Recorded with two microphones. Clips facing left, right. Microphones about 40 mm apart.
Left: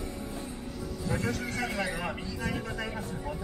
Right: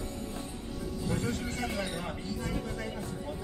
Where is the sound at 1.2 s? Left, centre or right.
Left.